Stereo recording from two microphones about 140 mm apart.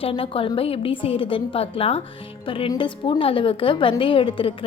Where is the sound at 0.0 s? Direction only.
40° left (ahead or behind).